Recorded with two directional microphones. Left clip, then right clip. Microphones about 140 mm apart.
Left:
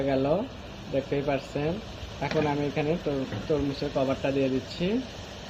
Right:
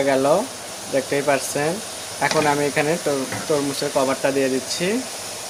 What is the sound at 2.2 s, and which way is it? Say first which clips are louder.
Speech: right 10 dB; 30° right (ahead or behind).